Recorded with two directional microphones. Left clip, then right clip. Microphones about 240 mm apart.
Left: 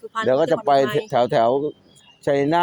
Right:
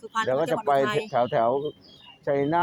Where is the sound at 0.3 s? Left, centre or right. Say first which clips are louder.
Left 7 dB; left.